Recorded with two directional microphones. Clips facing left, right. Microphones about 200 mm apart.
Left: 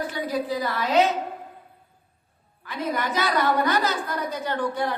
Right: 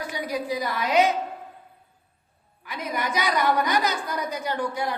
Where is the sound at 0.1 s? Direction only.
15° right (ahead or behind).